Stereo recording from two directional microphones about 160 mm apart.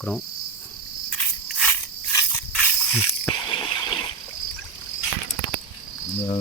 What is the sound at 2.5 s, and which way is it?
Mechanisms, 5° left (ahead or behind).